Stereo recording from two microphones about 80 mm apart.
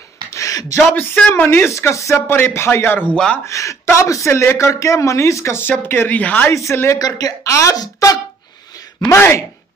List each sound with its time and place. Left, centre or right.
0.3 s a sound: left
0.9 s speech: centre
1.7 s speech: left
3.4 s speech: left; by 6.5 s centre
6.5 s speech: left
7.0 s speech: left
9.1 s speech: left